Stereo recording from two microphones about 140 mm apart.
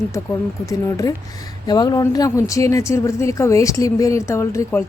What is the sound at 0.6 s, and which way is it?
Speech, 25° left (ahead or behind).